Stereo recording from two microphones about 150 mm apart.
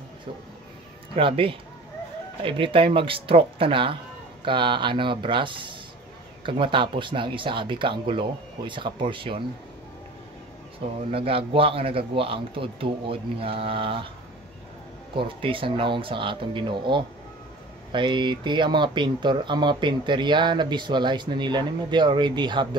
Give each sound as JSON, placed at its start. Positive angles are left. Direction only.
{"t": 1.1, "sound": "speech", "side_deg": -35}
{"t": 11.1, "sound": "speech", "side_deg": -40}
{"t": 15.1, "sound": "speech", "side_deg": -35}